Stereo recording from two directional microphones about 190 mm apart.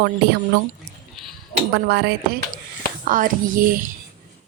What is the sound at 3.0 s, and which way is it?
Speech, 45° right (ahead or behind).